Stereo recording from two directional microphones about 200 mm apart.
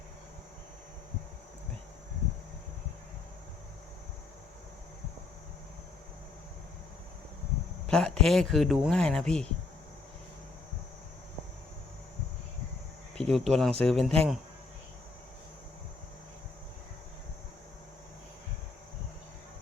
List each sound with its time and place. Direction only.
7.9 s a man's voice: 5° left (ahead or behind)
13.1 s a man's voice: 5° left (ahead or behind)